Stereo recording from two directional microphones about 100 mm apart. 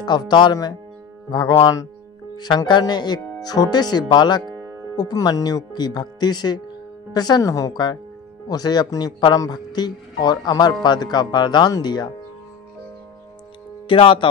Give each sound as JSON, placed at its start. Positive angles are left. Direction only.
{"t": 0.0, "sound": "a man's voice", "side_deg": 50}
{"t": 4.6, "sound": "music", "side_deg": -25}
{"t": 4.9, "sound": "a man's voice", "side_deg": 40}
{"t": 13.8, "sound": "speech", "side_deg": 60}